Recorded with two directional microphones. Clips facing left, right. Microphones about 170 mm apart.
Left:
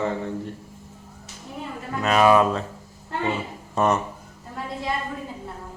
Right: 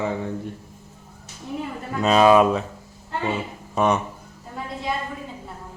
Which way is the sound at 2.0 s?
20° right (ahead or behind).